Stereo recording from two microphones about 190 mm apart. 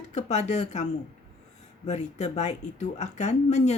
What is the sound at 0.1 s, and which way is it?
Speech, 40° left (ahead or behind).